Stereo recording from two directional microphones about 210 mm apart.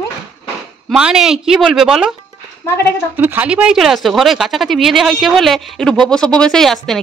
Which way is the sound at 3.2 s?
10° right (ahead or behind).